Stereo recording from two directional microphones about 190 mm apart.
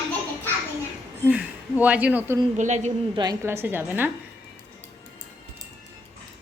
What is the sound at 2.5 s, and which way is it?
Speech, 40° right (ahead or behind).